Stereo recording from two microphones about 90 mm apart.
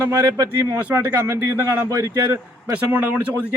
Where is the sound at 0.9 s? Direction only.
35° right (ahead or behind).